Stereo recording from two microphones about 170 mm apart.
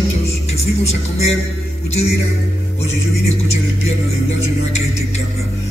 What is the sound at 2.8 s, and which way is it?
Music, 40° left (ahead or behind).